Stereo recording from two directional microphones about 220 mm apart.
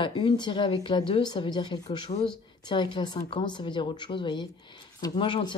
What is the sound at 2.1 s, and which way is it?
A woman's voice, 30° left (ahead or behind).